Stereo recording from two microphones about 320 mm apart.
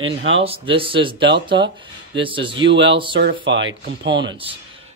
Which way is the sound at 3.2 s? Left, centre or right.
Right.